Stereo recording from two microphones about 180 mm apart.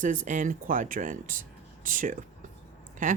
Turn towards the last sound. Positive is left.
turn(degrees=-45)  # may be behind; listen again after turning